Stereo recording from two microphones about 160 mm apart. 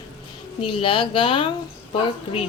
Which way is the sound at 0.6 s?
35° left (ahead or behind).